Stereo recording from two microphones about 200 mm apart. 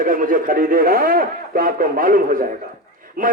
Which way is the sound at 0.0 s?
45° right (ahead or behind).